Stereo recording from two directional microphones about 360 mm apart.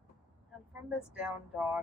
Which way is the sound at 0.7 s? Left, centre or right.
Centre.